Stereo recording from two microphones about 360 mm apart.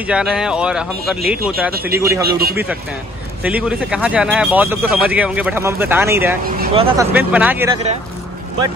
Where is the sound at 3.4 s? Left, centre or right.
Centre.